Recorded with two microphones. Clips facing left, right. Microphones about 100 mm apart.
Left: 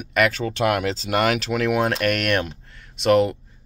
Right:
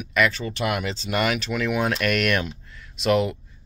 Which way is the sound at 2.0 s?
50° left (ahead or behind).